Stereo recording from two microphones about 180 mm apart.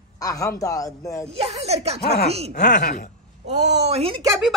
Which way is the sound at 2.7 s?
50° left (ahead or behind).